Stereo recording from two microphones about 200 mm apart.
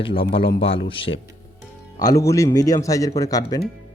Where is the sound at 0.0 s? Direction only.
25° left (ahead or behind).